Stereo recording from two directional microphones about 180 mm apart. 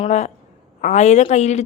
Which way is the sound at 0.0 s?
40° left (ahead or behind).